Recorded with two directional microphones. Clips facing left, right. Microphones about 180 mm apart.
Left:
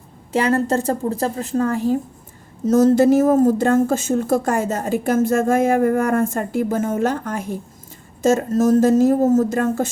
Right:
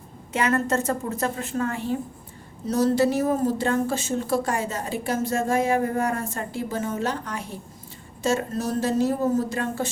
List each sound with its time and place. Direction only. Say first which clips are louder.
0.3 s a woman's voice: left 5 dB; 35° left (ahead or behind)